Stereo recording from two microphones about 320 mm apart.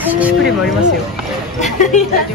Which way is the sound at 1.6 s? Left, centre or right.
Left.